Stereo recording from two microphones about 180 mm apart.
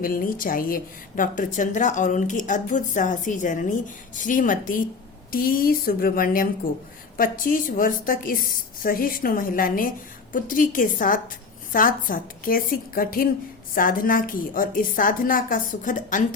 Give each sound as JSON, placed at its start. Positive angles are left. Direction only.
{"t": 0.0, "sound": "a woman's voice", "side_deg": 50}